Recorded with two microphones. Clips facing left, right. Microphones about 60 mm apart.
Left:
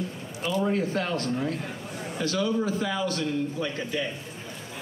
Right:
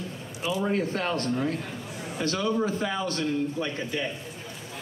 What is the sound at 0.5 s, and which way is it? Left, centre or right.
Speech, right.